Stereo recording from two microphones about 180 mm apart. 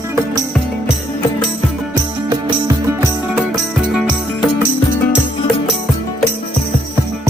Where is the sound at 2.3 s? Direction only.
20° right (ahead or behind).